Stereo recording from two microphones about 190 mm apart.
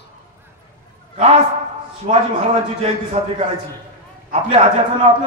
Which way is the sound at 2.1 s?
35° right (ahead or behind).